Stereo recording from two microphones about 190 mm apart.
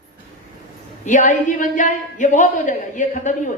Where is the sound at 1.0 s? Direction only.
40° left (ahead or behind).